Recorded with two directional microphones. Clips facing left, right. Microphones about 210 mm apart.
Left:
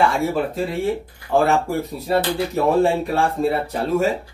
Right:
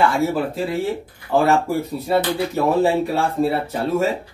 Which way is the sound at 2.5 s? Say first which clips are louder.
Even; centre (ahead or behind).